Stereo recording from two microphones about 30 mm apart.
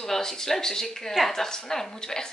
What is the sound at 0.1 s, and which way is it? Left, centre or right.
A woman's voice, centre.